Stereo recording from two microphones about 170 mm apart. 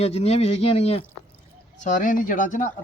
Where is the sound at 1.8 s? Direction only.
50° left (ahead or behind).